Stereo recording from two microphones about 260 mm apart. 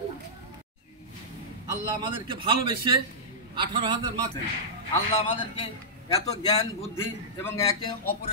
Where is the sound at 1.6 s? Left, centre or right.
Centre.